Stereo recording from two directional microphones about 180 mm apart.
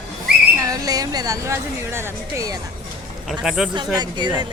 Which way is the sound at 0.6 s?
20° right (ahead or behind).